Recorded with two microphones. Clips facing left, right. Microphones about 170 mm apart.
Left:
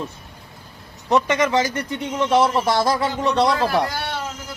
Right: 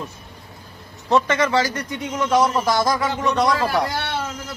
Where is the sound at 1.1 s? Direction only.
15° left (ahead or behind).